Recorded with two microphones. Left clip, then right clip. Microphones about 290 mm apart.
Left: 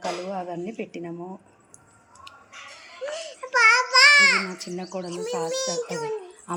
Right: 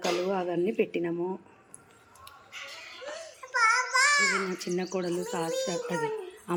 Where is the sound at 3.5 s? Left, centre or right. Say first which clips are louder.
Left 7 dB; left.